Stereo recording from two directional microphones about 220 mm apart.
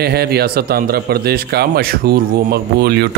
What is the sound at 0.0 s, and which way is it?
Speech, 45° right (ahead or behind).